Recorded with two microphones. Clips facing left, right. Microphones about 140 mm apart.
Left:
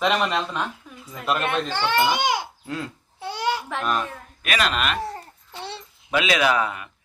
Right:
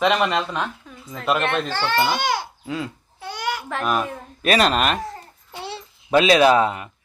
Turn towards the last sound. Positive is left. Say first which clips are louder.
# right 6 dB
turn(degrees=-30)  # may be behind; listen again after turning